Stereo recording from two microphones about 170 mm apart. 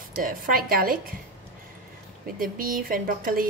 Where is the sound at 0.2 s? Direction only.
55° right (ahead or behind).